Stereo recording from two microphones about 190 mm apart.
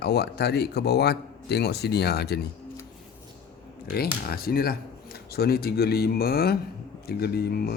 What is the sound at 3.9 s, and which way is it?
Speech, 55° left (ahead or behind).